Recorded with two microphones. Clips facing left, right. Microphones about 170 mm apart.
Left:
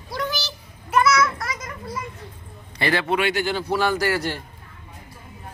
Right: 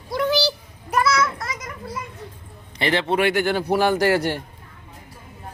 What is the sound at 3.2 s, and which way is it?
Speech, 55° right (ahead or behind).